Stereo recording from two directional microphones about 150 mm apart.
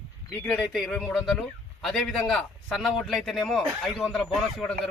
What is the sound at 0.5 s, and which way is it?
A man's voice, centre (ahead or behind).